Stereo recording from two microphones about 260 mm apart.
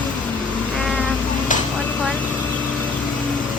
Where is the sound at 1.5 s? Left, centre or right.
Left.